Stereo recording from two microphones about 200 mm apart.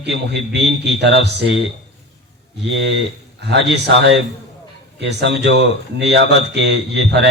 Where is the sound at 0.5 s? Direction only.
60° right (ahead or behind).